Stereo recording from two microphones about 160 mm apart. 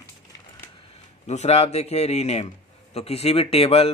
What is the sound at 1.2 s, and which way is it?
Speech, 45° left (ahead or behind).